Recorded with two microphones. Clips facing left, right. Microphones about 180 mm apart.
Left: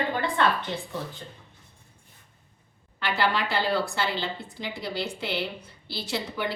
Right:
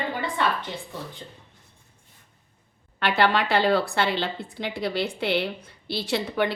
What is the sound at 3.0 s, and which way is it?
A woman's voice, 65° right (ahead or behind).